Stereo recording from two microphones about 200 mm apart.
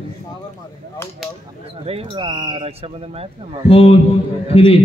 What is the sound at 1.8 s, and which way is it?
Speech, 30° right (ahead or behind).